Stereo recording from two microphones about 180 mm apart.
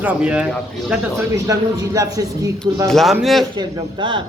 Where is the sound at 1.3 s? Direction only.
20° right (ahead or behind).